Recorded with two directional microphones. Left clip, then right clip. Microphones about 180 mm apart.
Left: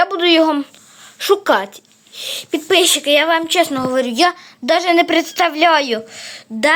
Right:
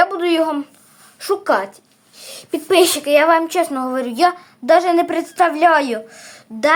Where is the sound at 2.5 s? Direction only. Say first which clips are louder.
Even; centre (ahead or behind).